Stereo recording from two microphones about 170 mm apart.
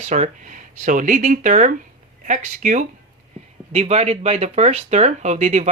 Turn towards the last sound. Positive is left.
turn(degrees=-40)  # may be behind; listen again after turning